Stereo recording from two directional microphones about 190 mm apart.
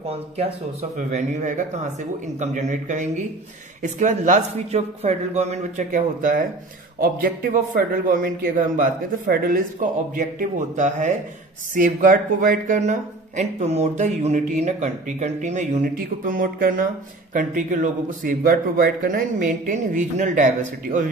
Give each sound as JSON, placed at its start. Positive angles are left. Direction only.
{"t": 0.9, "sound": "a man's voice", "side_deg": -40}